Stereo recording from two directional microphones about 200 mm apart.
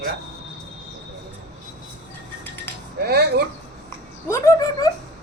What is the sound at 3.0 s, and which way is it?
Speech, 55° right (ahead or behind).